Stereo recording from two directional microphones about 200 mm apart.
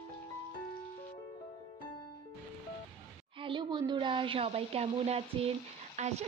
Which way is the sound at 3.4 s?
25° right (ahead or behind).